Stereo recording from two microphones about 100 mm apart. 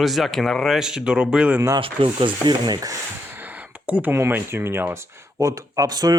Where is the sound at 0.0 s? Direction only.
Centre (ahead or behind).